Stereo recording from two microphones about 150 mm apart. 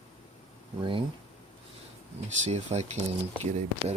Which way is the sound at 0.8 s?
35° right (ahead or behind).